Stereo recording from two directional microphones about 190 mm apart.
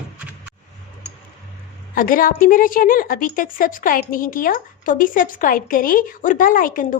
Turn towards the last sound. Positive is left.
turn(degrees=45)  # may be behind; listen again after turning